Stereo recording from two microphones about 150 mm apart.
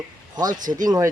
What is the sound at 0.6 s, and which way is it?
Speech, 60° right (ahead or behind).